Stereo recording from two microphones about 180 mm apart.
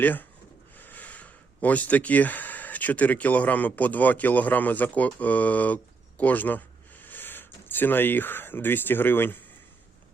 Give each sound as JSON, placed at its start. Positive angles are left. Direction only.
{"t": 0.0, "sound": "speech", "side_deg": 10}